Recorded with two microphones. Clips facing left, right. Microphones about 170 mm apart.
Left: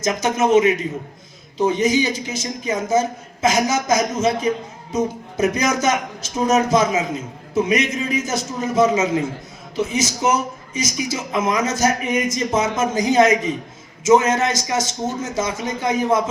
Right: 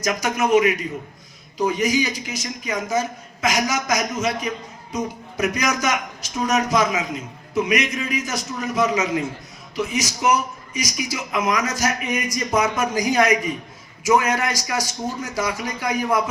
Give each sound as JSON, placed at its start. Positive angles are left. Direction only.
{"t": 0.0, "sound": "a man's voice", "side_deg": 25}